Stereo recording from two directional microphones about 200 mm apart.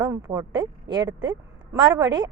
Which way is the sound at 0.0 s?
20° right (ahead or behind).